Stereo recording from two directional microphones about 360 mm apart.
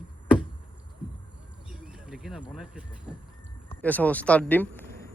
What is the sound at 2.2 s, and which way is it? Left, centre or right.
Speech, centre.